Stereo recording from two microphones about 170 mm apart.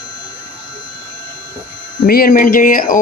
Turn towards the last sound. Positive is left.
turn(degrees=50)  # may be behind; listen again after turning